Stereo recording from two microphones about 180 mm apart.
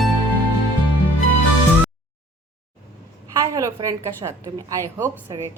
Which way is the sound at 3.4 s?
20° right (ahead or behind).